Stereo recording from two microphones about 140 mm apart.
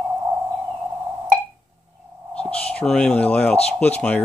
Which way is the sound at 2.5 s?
10° left (ahead or behind).